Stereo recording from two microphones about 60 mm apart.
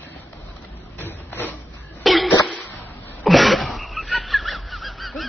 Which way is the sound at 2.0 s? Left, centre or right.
Centre.